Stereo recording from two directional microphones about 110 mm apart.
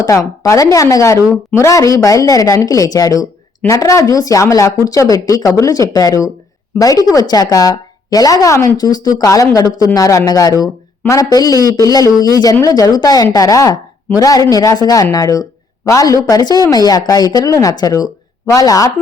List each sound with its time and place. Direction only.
0.0 s a woman's voice: 30° left (ahead or behind)